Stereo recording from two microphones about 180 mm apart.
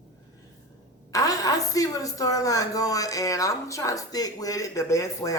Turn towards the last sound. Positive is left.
turn(degrees=20)  # may be behind; listen again after turning